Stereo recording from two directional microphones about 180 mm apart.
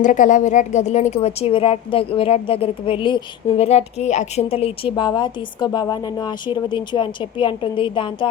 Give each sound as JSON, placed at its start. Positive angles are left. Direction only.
{"t": 0.0, "sound": "a woman's voice", "side_deg": 45}